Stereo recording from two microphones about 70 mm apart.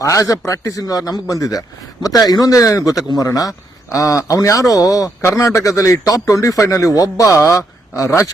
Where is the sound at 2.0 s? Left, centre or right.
Left.